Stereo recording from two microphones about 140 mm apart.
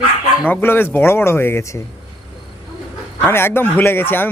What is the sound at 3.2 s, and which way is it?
Speech, 15° left (ahead or behind).